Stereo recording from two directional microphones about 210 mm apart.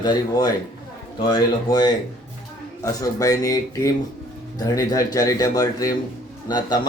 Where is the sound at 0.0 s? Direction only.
20° left (ahead or behind).